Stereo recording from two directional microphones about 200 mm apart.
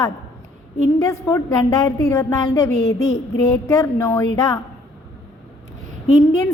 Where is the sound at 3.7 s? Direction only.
15° left (ahead or behind).